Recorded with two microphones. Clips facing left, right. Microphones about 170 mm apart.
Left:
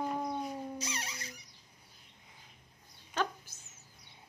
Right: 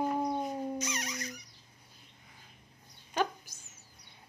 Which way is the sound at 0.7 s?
30° left (ahead or behind).